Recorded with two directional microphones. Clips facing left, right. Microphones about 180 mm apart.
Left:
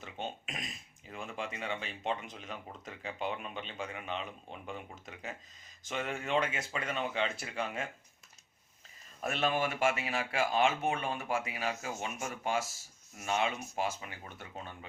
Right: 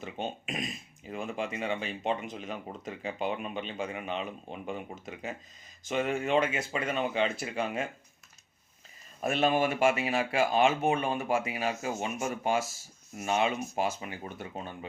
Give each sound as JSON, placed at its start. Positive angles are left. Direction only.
{"t": 0.0, "sound": "speech", "side_deg": -10}
{"t": 9.2, "sound": "speech", "side_deg": -15}